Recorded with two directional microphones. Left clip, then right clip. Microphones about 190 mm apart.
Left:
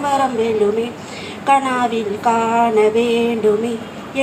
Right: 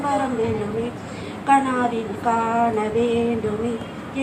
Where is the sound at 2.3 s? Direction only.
55° left (ahead or behind).